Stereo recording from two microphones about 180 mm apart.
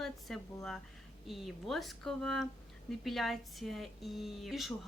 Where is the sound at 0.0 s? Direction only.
Centre (ahead or behind).